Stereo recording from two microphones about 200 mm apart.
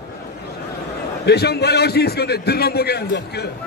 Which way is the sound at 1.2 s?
55° left (ahead or behind).